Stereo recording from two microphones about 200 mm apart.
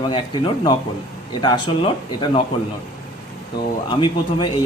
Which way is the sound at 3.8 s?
25° left (ahead or behind).